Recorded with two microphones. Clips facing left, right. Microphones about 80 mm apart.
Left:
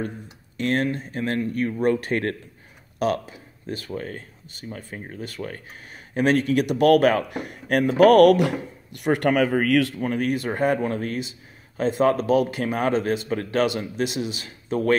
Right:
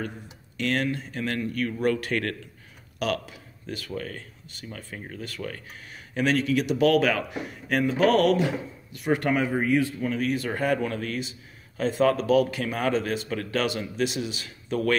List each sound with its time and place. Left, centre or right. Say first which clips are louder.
0.6 s speech: left 3 dB; left
9.9 s speech: left 2 dB; left
10.5 s speech: left 3 dB; left